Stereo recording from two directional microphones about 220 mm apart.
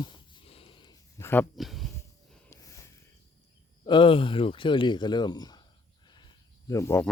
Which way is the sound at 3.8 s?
20° left (ahead or behind).